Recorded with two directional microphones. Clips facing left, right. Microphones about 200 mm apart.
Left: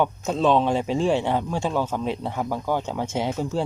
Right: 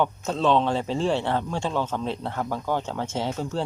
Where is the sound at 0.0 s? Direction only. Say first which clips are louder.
Left 2 dB; 10° left (ahead or behind).